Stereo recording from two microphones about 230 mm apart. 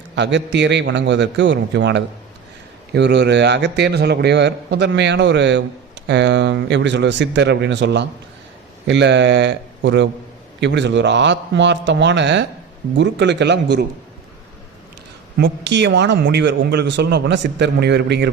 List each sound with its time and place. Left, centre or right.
0.2 s a man's voice: right
15.4 s a man's voice: right